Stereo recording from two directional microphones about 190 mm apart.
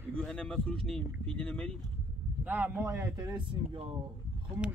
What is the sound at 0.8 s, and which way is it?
Speech, 5° left (ahead or behind).